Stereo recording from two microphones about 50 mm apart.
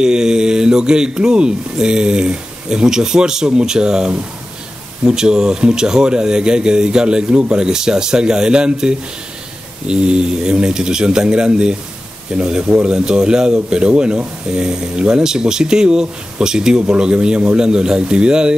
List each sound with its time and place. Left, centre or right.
0.0 s speech: centre
12.6 s a man's voice: right
12.9 s speech: centre